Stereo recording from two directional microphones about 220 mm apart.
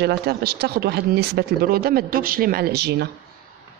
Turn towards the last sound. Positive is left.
turn(degrees=-45)  # may be behind; listen again after turning